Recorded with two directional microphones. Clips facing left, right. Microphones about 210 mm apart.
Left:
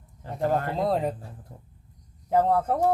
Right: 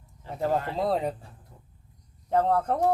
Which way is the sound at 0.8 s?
Centre (ahead or behind).